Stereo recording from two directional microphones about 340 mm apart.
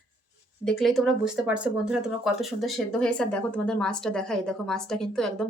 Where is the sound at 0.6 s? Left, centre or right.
Centre.